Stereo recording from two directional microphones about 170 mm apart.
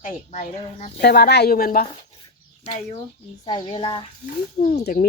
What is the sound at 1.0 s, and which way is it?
Speech, 70° left (ahead or behind).